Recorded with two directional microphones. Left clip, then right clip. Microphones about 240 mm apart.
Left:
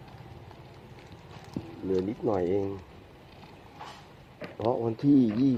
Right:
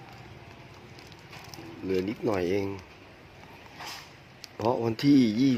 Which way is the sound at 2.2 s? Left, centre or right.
Right.